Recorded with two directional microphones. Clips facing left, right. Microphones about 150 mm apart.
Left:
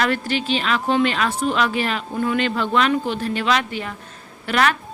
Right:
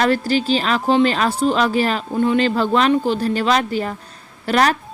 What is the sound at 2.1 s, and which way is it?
A woman's voice, 25° right (ahead or behind).